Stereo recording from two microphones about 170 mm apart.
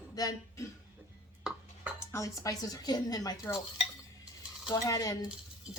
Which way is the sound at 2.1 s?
20° left (ahead or behind).